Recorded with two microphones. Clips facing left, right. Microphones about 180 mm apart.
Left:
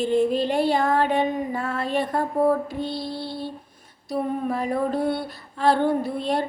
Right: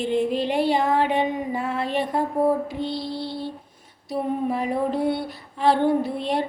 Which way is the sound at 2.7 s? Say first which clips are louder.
Right 1 dB; 50° left (ahead or behind).